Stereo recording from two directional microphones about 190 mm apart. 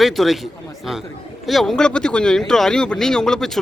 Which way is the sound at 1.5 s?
Centre (ahead or behind).